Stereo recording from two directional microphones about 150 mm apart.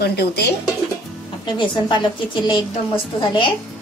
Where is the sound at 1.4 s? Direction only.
30° left (ahead or behind).